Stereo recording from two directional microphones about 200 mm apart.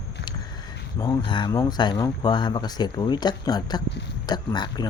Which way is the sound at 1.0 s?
20° left (ahead or behind).